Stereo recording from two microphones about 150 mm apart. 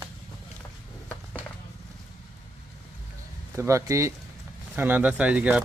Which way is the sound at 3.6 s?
20° right (ahead or behind).